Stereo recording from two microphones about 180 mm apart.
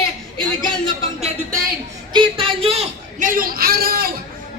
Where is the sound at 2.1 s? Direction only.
30° right (ahead or behind).